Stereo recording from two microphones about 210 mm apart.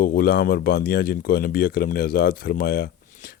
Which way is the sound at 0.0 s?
45° left (ahead or behind).